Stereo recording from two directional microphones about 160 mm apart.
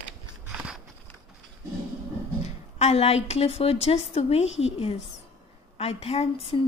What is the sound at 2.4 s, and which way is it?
A woman's voice, 45° left (ahead or behind).